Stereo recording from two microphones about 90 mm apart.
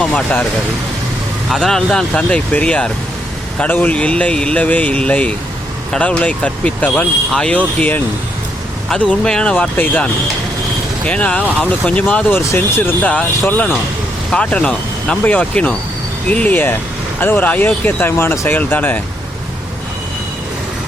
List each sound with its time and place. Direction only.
0.0 s speech: 10° left (ahead or behind)
1.5 s speech: 5° left (ahead or behind); by 18.9 s 20° left (ahead or behind)